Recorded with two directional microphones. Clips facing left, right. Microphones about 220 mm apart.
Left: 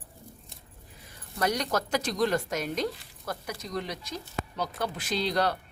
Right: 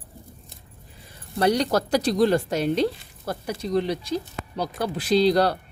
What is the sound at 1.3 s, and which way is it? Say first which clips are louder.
Speech: right 7 dB; 30° right (ahead or behind).